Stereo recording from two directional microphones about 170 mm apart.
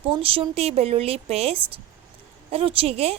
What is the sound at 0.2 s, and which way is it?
A woman's voice, 35° right (ahead or behind).